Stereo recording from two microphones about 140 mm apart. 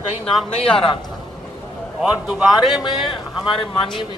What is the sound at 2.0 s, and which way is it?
Speech, 5° right (ahead or behind).